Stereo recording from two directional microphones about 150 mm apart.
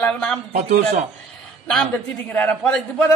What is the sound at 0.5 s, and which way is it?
Speech, 60° right (ahead or behind).